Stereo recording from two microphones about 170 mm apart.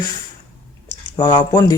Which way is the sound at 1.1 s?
25° left (ahead or behind).